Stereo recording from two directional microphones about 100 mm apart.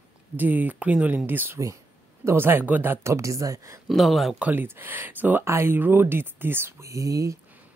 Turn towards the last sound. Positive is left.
turn(degrees=-35)  # may be behind; listen again after turning